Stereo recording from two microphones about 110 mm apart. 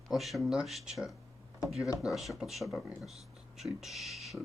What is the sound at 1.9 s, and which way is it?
Speech, 30° left (ahead or behind).